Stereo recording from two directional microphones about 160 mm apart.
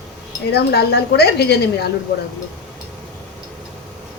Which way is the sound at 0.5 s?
90° left.